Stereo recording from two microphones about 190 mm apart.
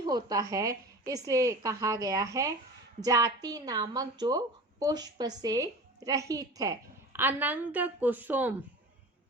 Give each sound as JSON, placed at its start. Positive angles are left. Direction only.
{"t": 0.0, "sound": "a woman's voice", "side_deg": -20}